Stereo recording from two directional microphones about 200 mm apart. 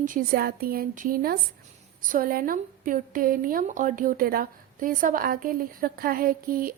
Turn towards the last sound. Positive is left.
turn(degrees=-45)  # may be behind; listen again after turning